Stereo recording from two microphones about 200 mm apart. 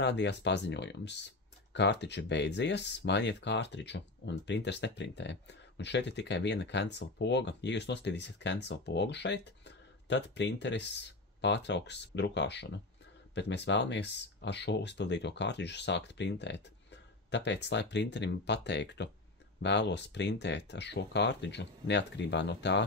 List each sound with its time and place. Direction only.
0.0 s speech: 60° left (ahead or behind)